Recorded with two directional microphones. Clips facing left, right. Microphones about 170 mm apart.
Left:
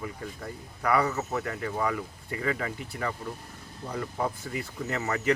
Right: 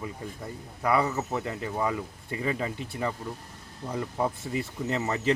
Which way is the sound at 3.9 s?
20° right (ahead or behind).